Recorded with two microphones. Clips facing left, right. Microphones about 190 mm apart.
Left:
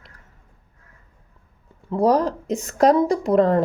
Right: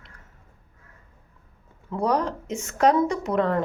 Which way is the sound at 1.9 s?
35° left (ahead or behind).